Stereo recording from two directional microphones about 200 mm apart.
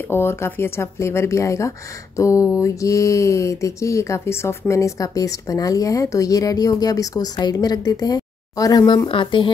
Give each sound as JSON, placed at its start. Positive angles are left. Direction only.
{"t": 0.1, "sound": "speech", "side_deg": 10}